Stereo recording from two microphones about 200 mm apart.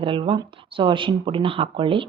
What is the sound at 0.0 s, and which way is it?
Speech, 25° right (ahead or behind).